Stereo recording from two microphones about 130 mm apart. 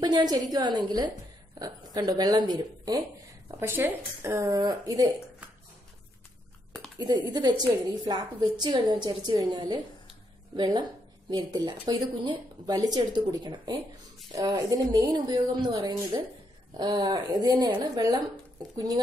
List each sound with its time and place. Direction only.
0.0 s a woman's voice: 35° right (ahead or behind)
4.6 s speech: 30° right (ahead or behind)
7.0 s a woman's voice: 35° right (ahead or behind)